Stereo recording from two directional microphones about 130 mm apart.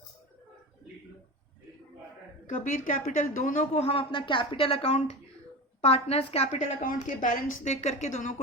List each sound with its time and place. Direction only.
2.5 s a woman's voice: 80° left
3.8 s a woman's voice: 45° left (ahead or behind)
6.8 s speech: 90° left; by 8.4 s 70° left (ahead or behind)